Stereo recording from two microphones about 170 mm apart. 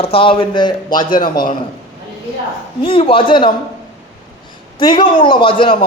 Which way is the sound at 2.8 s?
30° left (ahead or behind).